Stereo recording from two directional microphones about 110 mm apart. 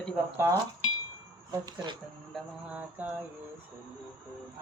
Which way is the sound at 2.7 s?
15° right (ahead or behind).